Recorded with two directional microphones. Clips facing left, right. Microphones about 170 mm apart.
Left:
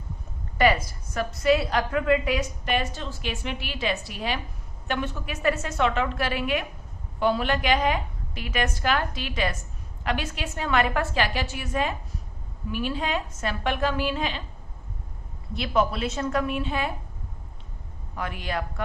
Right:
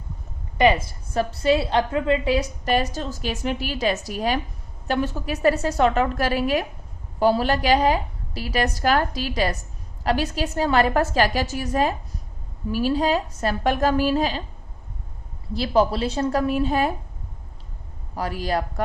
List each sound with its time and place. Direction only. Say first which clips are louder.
0.6 s a woman's voice: right 3 dB; 25° right (ahead or behind)
15.5 s a woman's voice: right 5 dB; 35° right (ahead or behind)
18.1 s a woman's voice: right 6 dB; 35° right (ahead or behind)